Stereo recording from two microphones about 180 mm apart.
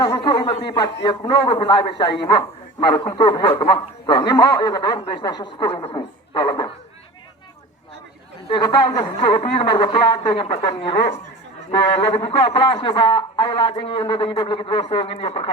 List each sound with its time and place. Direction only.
0.0 s a man's voice: 25° left (ahead or behind)
8.4 s a man's voice: 25° left (ahead or behind)